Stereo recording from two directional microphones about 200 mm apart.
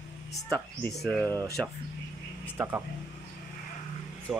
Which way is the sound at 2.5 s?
10° right (ahead or behind).